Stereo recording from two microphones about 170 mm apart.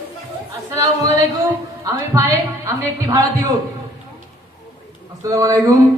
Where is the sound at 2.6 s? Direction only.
20° right (ahead or behind).